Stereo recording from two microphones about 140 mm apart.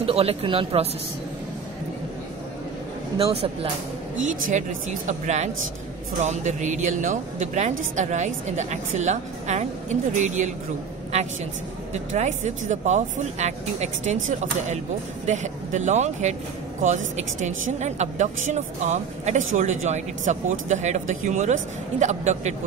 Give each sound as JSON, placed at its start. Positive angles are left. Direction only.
{"t": 0.0, "sound": "speech", "side_deg": -45}
{"t": 3.2, "sound": "speech", "side_deg": -45}
{"t": 4.2, "sound": "speech", "side_deg": -60}
{"t": 11.9, "sound": "speech", "side_deg": -55}